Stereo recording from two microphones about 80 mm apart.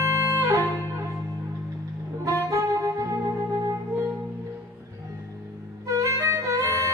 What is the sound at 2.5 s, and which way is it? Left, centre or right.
Saxophone, right.